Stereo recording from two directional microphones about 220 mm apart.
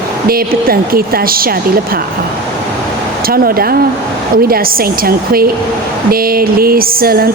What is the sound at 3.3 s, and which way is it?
A woman's voice, 40° right (ahead or behind).